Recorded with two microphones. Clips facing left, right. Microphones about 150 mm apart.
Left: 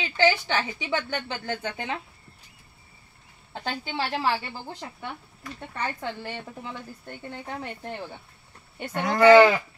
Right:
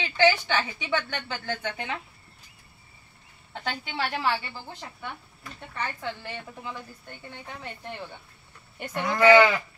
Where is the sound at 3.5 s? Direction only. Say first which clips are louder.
Left 2 dB; 30° left (ahead or behind).